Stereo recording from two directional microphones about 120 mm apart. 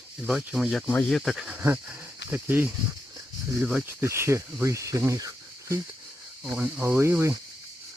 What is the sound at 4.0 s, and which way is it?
Speech, 20° right (ahead or behind).